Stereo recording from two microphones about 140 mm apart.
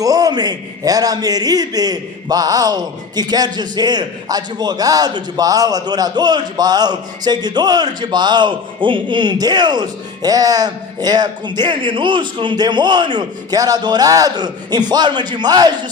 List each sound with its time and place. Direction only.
0.0 s a man's voice: 25° right (ahead or behind)